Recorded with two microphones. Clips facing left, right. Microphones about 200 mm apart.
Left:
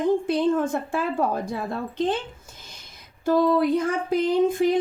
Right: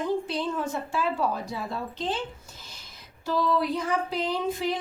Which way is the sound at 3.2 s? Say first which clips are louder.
Left 6 dB; 50° left (ahead or behind).